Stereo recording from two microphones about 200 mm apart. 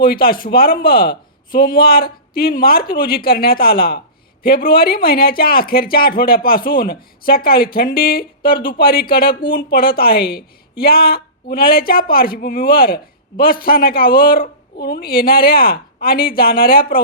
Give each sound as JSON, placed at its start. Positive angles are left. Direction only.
{"t": 0.0, "sound": "a woman's voice", "side_deg": 50}